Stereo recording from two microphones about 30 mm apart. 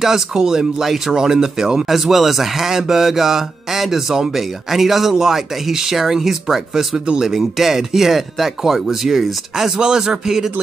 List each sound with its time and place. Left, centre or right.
0.0 s speech: centre
1.9 s speech: centre
9.8 s speech: right